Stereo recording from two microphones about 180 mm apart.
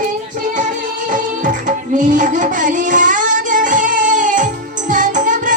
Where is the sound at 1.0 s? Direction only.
45° right (ahead or behind).